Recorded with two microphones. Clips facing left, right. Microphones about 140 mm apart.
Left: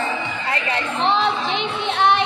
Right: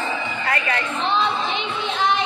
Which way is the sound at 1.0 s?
90° left.